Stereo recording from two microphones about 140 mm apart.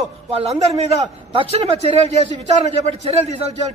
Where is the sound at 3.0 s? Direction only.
50° right (ahead or behind).